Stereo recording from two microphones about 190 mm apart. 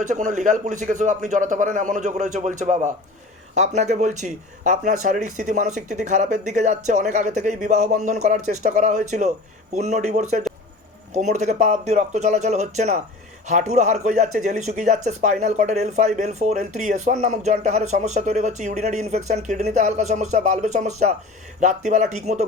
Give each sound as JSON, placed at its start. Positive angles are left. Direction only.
{"t": 0.0, "sound": "speech", "side_deg": -40}